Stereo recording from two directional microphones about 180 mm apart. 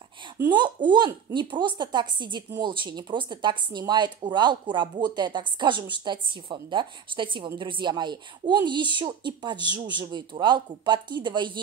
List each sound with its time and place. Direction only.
0.4 s speech: 25° right (ahead or behind)